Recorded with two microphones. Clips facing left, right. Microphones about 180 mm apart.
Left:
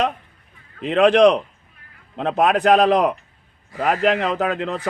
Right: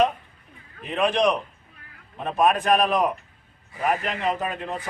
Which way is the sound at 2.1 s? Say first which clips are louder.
Left 3 dB; 90° left.